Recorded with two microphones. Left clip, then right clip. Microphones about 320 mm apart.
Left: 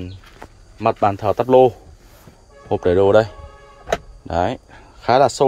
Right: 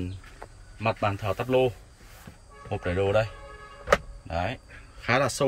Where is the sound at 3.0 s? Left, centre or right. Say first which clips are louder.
Left 11 dB; left.